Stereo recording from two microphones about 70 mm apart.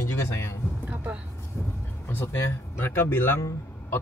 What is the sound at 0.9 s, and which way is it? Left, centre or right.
Speech, right.